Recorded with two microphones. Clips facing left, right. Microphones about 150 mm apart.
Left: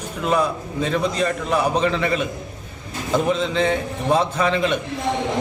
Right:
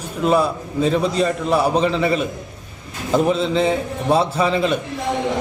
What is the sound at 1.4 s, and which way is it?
Speech, 35° right (ahead or behind).